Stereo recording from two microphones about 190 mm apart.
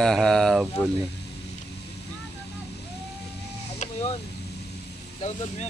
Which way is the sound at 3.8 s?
35° left (ahead or behind).